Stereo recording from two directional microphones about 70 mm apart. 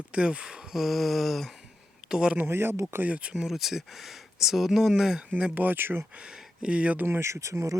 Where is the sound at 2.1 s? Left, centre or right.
Centre.